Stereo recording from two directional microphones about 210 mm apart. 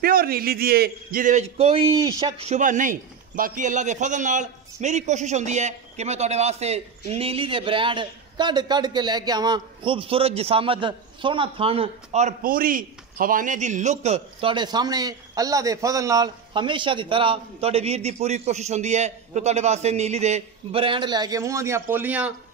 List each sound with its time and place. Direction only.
0.0 s a man's voice: 45° right (ahead or behind); by 22.3 s 5° right (ahead or behind)